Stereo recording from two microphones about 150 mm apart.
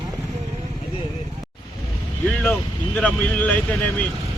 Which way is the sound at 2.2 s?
10° left (ahead or behind).